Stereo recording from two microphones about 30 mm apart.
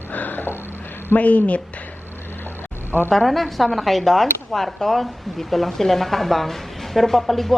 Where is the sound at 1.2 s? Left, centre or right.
Left.